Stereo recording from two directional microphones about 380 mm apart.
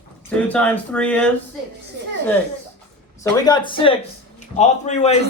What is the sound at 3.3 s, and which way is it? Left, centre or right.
A man's voice, centre.